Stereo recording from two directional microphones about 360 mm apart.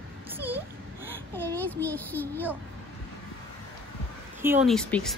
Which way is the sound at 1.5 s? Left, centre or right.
Centre.